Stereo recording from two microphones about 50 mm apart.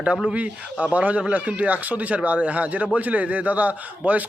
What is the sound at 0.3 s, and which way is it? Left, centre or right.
Speech, right.